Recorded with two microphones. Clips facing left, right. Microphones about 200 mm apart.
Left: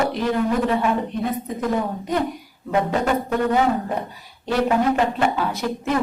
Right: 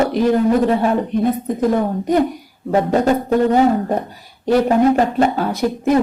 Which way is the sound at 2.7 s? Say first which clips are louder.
Right 5 dB; 40° right (ahead or behind).